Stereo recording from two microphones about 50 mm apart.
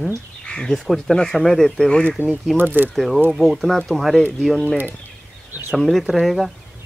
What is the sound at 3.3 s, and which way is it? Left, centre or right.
Speech, centre.